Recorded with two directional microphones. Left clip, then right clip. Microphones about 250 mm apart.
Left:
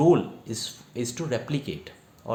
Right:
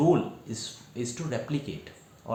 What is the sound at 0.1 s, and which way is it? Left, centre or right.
Speech, left.